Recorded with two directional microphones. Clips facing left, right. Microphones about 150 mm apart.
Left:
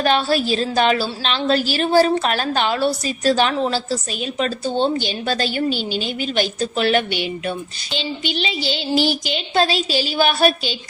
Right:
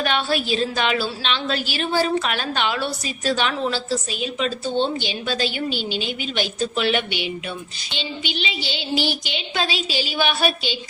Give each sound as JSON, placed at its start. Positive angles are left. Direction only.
{"t": 0.0, "sound": "a woman's voice", "side_deg": 40}